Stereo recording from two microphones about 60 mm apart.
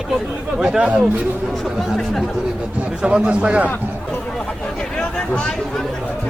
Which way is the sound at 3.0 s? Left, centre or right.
Centre.